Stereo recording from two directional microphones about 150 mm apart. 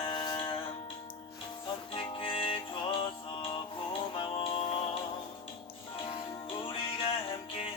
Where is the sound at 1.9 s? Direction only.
35° left (ahead or behind).